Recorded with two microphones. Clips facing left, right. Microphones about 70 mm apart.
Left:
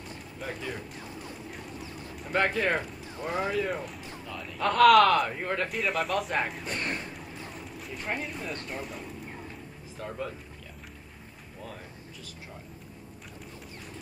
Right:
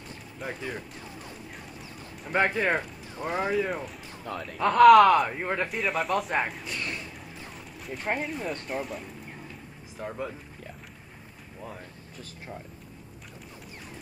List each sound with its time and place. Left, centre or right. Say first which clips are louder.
0.4 s speech: right 1 dB; centre
2.3 s speech: right 2 dB; centre
3.6 s speech: even; centre
5.7 s speech: right 1 dB; centre
6.6 s speech: left 2 dB; left
7.2 s a sound: left 2 dB; centre
8.2 s speech: right 3 dB; centre
9.9 s speech: right 2 dB; centre
11.6 s speech: right 2 dB; centre